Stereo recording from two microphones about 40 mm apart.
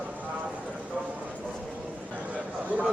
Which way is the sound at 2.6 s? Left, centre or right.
Right.